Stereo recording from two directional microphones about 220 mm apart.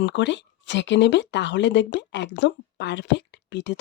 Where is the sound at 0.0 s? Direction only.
55° left (ahead or behind).